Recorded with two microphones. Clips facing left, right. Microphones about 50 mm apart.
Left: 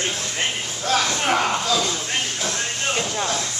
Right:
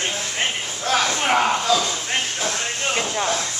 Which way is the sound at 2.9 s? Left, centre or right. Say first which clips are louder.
Right 2 dB; centre.